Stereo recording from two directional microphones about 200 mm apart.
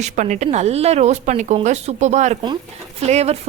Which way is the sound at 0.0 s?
35° right (ahead or behind).